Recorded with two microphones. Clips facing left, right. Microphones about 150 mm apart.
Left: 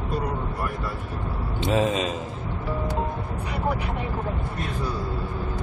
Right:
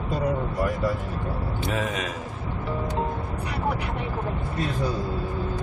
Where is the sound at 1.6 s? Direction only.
25° left (ahead or behind).